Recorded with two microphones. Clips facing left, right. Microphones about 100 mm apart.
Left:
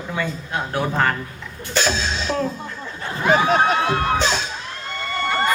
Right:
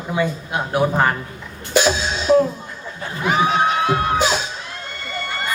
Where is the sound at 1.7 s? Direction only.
15° right (ahead or behind).